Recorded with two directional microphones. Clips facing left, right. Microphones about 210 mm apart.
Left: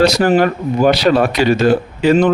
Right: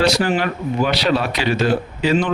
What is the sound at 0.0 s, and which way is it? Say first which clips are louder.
Speech: left 6 dB; 40° left (ahead or behind).